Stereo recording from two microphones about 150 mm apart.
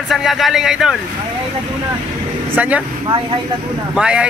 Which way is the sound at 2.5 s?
10° right (ahead or behind).